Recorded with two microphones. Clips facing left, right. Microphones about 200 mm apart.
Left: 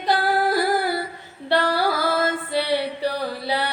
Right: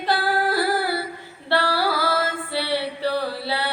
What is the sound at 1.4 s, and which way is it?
Female singing, 15° left (ahead or behind).